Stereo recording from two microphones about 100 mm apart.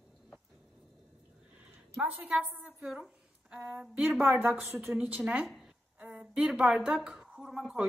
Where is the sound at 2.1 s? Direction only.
15° right (ahead or behind).